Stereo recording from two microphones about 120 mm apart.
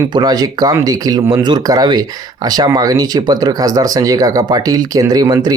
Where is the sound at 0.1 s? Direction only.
35° right (ahead or behind).